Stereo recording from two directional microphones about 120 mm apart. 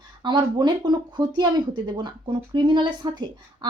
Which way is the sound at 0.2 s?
40° right (ahead or behind).